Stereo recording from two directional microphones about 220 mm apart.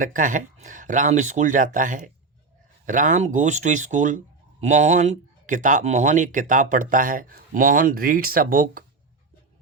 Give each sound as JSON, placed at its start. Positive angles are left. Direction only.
{"t": 0.0, "sound": "speech", "side_deg": -35}